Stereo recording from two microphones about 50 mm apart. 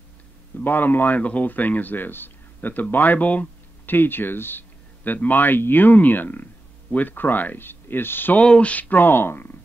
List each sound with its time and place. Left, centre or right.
0.7 s speech: left
8.4 s speech: left